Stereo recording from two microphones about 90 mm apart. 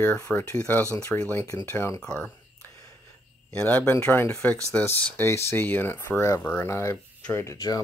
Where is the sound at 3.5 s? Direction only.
20° left (ahead or behind).